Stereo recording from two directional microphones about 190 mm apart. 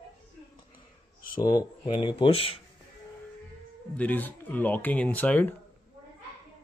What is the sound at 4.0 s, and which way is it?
Speech, 10° left (ahead or behind).